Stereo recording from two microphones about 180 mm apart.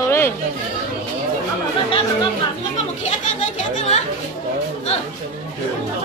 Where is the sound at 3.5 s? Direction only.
40° left (ahead or behind).